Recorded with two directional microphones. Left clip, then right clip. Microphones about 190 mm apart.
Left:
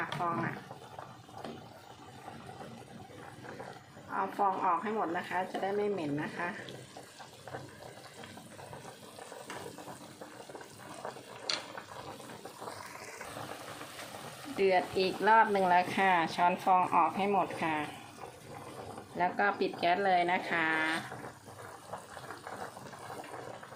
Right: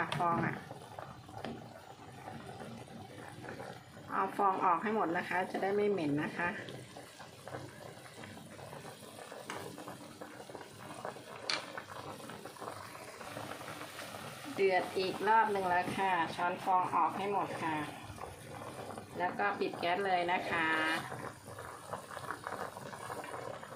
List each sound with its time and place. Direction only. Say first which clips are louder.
0.0 s a woman's voice: right 1 dB; 5° right (ahead or behind)
4.1 s a woman's voice: even; 10° right (ahead or behind)
14.5 s speech: left 3 dB; 20° left (ahead or behind); by 17.8 s 35° left (ahead or behind)
19.2 s speech: left 4 dB; 30° left (ahead or behind)